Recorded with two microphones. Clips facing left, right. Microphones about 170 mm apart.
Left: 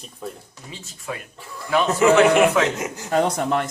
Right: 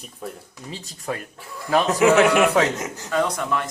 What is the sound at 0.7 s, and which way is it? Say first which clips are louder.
Speech: right 3 dB; 40° right (ahead or behind).